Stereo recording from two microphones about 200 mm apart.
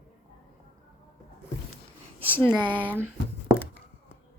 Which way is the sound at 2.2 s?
10° left (ahead or behind).